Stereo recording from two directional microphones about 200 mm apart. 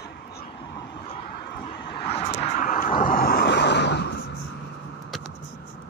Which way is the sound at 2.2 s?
45° left (ahead or behind).